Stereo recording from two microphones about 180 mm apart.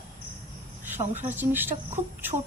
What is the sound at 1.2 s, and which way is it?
Speech, 10° right (ahead or behind).